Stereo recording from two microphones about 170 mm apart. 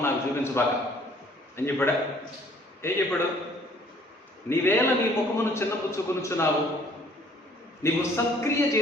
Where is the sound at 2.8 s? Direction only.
15° left (ahead or behind).